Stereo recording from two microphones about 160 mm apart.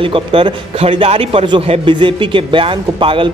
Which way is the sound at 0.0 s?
35° right (ahead or behind).